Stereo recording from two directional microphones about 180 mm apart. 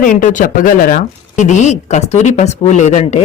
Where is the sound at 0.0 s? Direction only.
45° left (ahead or behind).